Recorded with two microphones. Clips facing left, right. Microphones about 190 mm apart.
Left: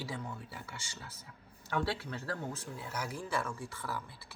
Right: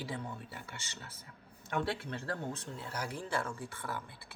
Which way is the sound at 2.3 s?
30° right (ahead or behind).